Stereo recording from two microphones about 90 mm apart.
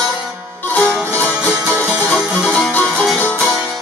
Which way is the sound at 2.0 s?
Centre (ahead or behind).